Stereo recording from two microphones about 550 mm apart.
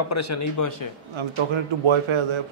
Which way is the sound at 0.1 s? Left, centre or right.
Left.